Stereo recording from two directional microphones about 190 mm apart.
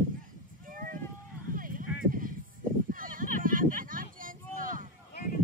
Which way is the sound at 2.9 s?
45° right (ahead or behind).